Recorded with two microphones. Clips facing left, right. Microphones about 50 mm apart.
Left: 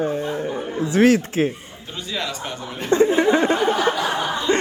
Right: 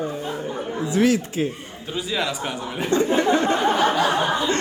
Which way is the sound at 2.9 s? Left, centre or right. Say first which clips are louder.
Left 3 dB; left.